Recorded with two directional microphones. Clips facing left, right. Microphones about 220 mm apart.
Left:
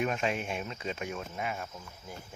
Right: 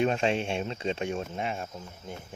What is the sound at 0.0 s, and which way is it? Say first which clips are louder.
Speech: right 5 dB; 30° right (ahead or behind).